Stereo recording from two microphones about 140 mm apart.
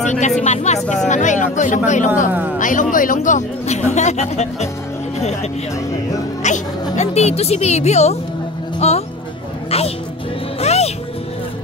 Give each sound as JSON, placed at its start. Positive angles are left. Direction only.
{"t": 0.0, "sound": "speech", "side_deg": 60}
{"t": 6.4, "sound": "a woman's voice", "side_deg": 55}
{"t": 10.6, "sound": "music", "side_deg": 50}